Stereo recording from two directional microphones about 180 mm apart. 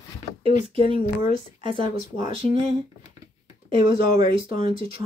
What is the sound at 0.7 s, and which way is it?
Speech, 30° right (ahead or behind).